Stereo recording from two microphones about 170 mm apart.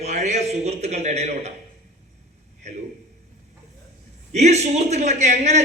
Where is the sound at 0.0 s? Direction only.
45° right (ahead or behind).